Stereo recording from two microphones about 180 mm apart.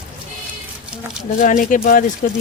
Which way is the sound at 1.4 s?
45° left (ahead or behind).